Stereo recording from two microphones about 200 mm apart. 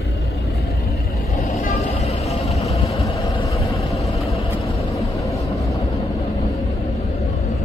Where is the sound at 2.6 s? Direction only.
15° left (ahead or behind).